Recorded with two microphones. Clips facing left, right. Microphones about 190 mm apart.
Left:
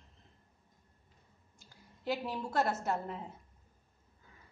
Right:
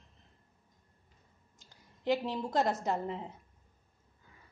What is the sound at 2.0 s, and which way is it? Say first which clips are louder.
A woman's voice: right 4 dB; 20° right (ahead or behind).